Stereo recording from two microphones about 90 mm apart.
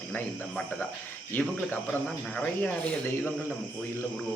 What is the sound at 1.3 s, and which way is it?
Speech, 20° left (ahead or behind).